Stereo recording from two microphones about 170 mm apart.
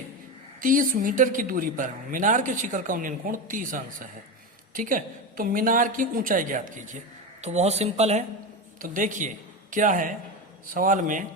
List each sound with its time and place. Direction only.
0.6 s speech: 55° right (ahead or behind)
8.8 s a man's voice: 50° right (ahead or behind)